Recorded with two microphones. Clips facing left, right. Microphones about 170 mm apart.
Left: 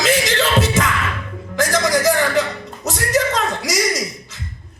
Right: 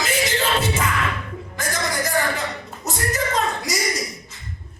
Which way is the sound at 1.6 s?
90° left.